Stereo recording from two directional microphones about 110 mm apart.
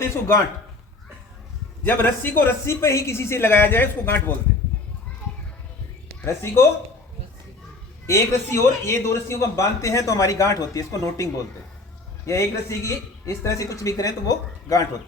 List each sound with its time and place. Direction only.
0.0 s a man's voice: 25° left (ahead or behind)
1.8 s a man's voice: 20° left (ahead or behind)
6.2 s a man's voice: 25° left (ahead or behind)
8.0 s a man's voice: 25° left (ahead or behind)